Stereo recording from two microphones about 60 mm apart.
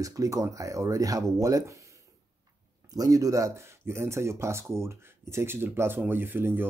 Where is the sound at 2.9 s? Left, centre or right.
Right.